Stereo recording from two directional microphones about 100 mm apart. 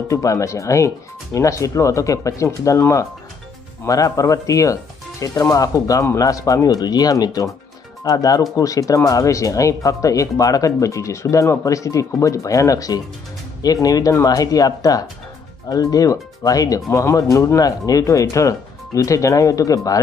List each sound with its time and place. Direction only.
0.1 s speech: 30° left (ahead or behind)